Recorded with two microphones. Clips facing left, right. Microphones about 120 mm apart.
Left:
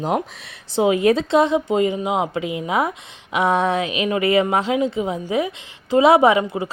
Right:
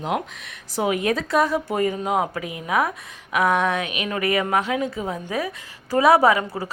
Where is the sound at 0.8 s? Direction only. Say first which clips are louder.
Left 6 dB; 25° left (ahead or behind).